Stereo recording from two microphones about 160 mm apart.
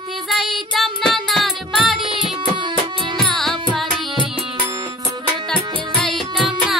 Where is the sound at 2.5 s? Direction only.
30° right (ahead or behind).